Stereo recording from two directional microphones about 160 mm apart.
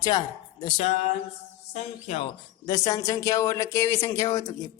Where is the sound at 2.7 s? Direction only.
25° left (ahead or behind).